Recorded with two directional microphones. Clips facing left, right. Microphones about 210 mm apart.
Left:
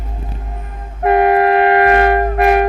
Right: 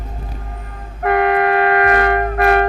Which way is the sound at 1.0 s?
25° left (ahead or behind).